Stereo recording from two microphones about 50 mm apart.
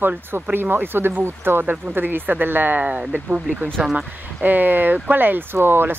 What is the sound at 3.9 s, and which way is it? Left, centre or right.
Speech, right.